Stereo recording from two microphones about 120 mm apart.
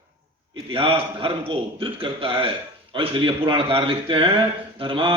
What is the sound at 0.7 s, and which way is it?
A man's voice, 50° right (ahead or behind).